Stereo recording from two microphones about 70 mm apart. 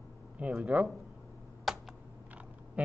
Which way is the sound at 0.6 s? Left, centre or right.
Centre.